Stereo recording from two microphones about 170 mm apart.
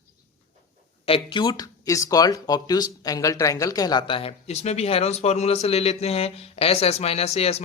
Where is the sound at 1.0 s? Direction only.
30° left (ahead or behind).